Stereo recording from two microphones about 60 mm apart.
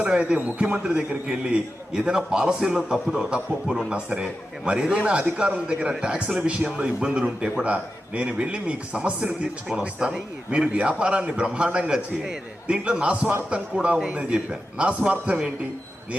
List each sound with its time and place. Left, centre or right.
0.0 s a man's voice: centre